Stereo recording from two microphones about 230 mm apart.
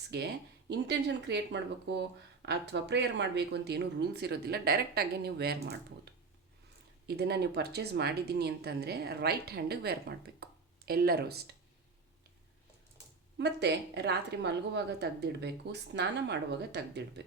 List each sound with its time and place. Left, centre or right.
0.7 s speech: right
7.2 s speech: right
13.4 s speech: right